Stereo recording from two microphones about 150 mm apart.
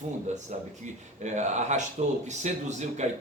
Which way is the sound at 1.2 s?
50° right (ahead or behind).